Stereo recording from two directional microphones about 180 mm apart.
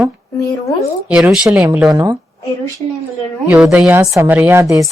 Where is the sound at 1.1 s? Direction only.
5° right (ahead or behind).